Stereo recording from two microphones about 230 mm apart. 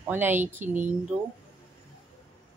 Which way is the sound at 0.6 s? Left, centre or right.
Right.